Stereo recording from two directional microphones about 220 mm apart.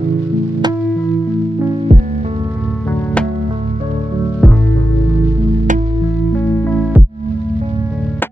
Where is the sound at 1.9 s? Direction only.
30° right (ahead or behind).